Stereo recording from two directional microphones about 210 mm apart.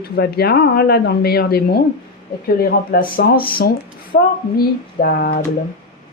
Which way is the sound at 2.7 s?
45° left (ahead or behind).